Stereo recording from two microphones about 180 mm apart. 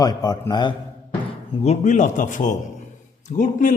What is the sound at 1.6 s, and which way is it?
A man's voice, 40° left (ahead or behind).